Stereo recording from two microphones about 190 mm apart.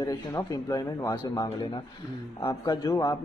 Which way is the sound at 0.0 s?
15° left (ahead or behind).